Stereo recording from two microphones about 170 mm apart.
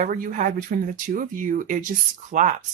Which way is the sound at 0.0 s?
55° right (ahead or behind).